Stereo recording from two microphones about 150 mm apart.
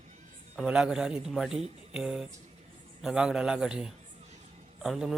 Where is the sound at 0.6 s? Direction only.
5° right (ahead or behind).